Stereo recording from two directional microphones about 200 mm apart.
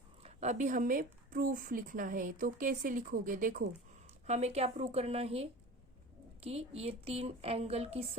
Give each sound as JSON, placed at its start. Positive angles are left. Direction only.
{"t": 0.2, "sound": "a woman's voice", "side_deg": -35}